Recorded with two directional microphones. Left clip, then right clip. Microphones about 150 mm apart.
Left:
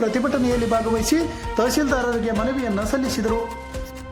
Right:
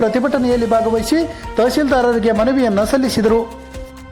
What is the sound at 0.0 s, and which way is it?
Speech, 15° right (ahead or behind).